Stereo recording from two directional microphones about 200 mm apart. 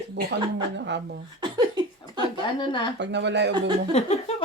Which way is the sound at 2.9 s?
60° right (ahead or behind).